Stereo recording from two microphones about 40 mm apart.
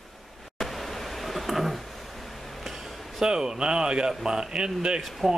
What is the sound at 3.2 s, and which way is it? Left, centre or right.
Speech, centre.